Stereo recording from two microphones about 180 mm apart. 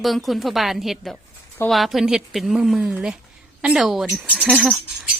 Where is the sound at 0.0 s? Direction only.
Centre (ahead or behind).